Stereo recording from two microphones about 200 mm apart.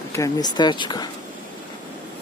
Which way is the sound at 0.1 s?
15° left (ahead or behind).